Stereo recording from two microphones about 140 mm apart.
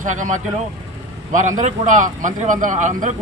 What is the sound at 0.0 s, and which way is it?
Speech, 65° right (ahead or behind).